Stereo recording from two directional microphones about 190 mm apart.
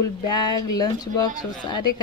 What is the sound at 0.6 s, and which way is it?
Speech, 20° left (ahead or behind).